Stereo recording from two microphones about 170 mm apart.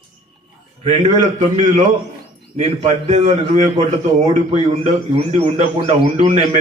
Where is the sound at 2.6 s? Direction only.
40° right (ahead or behind).